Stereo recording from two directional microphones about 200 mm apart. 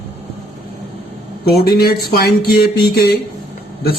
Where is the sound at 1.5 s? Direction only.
50° left (ahead or behind).